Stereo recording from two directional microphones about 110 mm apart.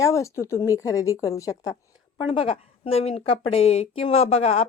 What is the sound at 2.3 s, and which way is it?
A woman's voice, 65° left (ahead or behind).